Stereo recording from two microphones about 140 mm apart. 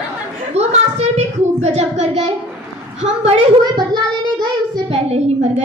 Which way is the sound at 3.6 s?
30° right (ahead or behind).